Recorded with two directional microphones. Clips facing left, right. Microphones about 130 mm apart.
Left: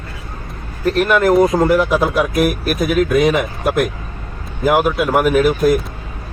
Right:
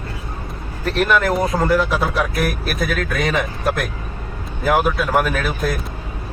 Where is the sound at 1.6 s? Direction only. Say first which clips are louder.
Left 4 dB; 15° left (ahead or behind).